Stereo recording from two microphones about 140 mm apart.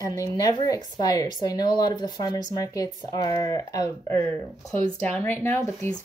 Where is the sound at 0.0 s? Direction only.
25° left (ahead or behind).